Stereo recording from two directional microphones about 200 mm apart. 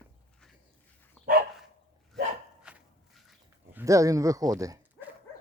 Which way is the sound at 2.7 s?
5° right (ahead or behind).